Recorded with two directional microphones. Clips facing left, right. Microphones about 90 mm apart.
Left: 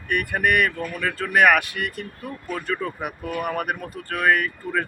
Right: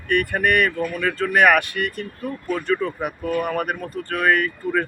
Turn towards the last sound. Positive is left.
turn(degrees=0)  # may be behind; listen again after turning